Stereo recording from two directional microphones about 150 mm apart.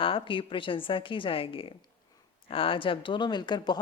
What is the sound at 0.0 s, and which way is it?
A woman's voice, 35° left (ahead or behind).